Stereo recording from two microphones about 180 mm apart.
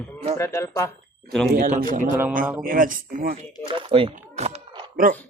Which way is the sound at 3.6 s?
30° right (ahead or behind).